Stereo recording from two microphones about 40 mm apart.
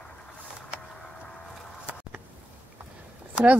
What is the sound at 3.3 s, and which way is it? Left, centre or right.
Speech, right.